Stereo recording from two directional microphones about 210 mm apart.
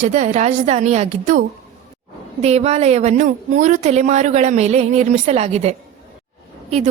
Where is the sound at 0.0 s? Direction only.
35° right (ahead or behind).